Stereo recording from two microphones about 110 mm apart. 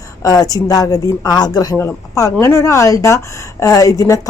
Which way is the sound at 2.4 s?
25° left (ahead or behind).